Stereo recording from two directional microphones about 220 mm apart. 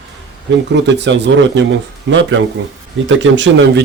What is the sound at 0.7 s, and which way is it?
Speech, 55° right (ahead or behind).